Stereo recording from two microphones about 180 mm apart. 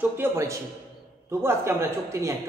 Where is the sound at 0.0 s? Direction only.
15° right (ahead or behind).